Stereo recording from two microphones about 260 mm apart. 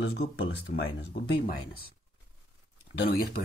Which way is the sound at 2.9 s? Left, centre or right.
Left.